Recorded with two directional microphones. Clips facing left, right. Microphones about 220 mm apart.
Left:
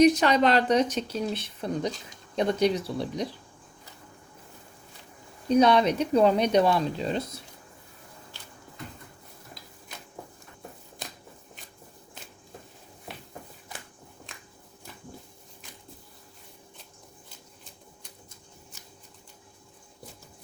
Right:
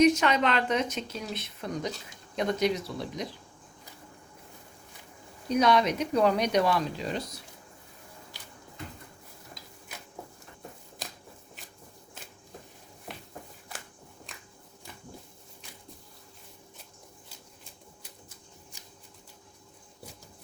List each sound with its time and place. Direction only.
0.0 s speech: 35° left (ahead or behind)
5.5 s speech: 30° left (ahead or behind)